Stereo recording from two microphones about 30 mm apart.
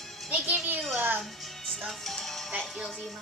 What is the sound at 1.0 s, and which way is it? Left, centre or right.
Speech, right.